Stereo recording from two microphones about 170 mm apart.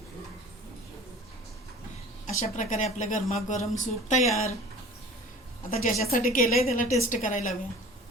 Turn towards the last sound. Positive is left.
turn(degrees=50)  # may be behind; listen again after turning